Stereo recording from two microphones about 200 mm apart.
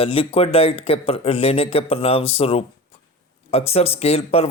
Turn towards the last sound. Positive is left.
turn(degrees=30)  # may be behind; listen again after turning